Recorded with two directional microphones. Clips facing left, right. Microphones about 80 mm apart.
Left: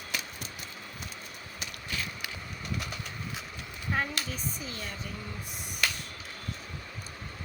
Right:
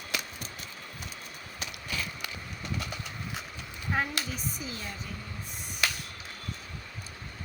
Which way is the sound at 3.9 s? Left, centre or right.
Centre.